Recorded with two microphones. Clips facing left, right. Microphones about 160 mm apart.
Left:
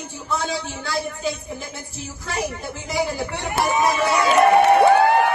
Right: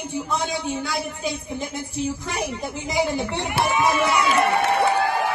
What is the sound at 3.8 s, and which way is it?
Speech, 30° left (ahead or behind).